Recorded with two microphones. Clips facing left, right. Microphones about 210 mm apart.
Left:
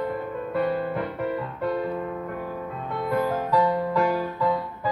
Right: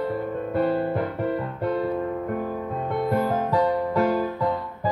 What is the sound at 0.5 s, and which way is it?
Music, 45° right (ahead or behind).